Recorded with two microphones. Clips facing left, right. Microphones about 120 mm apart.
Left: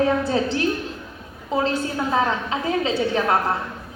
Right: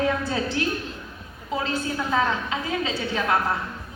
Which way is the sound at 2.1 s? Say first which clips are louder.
Left 1 dB; 30° left (ahead or behind).